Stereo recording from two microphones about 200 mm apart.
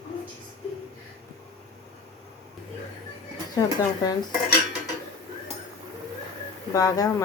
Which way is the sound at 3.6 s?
20° left (ahead or behind).